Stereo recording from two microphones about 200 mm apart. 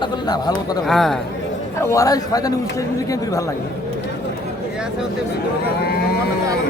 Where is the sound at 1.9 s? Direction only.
15° left (ahead or behind).